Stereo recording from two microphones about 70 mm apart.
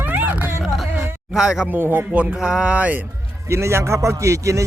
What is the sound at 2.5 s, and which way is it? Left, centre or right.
Speech, centre.